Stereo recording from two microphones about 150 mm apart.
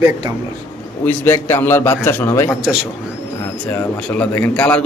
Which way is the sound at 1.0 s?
15° left (ahead or behind).